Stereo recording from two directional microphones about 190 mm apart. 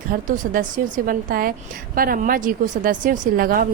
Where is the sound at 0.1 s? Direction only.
45° right (ahead or behind).